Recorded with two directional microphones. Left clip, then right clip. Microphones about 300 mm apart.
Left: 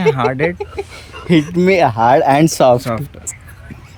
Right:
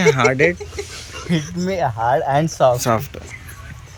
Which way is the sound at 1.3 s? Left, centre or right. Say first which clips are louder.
Left 11 dB; left.